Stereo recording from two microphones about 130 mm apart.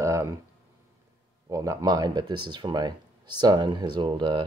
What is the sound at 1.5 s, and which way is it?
Speech, 25° right (ahead or behind).